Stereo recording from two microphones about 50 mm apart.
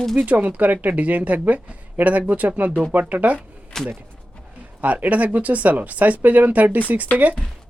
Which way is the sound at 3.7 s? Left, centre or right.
Centre.